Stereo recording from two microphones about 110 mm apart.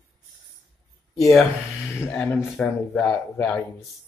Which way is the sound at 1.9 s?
15° left (ahead or behind).